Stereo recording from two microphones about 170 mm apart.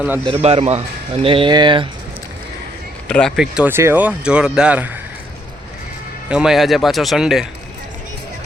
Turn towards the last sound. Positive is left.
turn(degrees=0)  # may be behind; listen again after turning